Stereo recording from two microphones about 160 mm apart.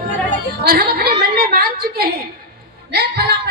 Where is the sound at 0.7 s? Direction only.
70° right (ahead or behind).